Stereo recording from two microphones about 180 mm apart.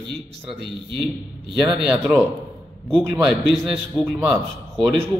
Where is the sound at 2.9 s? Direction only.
Centre (ahead or behind).